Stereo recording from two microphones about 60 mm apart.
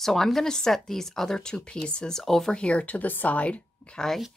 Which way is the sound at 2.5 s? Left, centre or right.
Centre.